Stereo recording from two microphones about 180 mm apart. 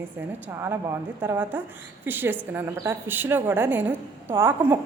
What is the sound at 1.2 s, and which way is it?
A woman's voice, 10° right (ahead or behind).